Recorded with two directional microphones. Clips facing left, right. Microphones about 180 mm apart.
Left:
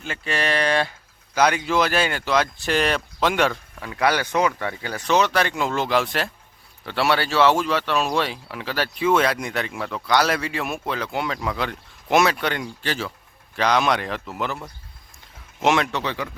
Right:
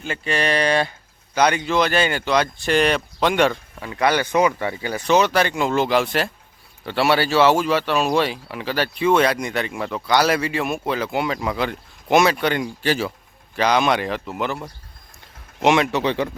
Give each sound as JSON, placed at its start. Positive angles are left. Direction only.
{"t": 0.0, "sound": "speech", "side_deg": 0}
{"t": 4.2, "sound": "speech", "side_deg": -10}
{"t": 15.6, "sound": "speech", "side_deg": 0}
{"t": 16.0, "sound": "speech", "side_deg": -30}